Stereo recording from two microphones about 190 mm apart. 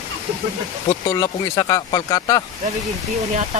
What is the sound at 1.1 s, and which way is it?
Speech, 20° left (ahead or behind).